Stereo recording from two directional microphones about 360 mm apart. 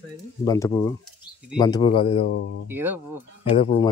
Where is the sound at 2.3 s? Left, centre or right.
Left.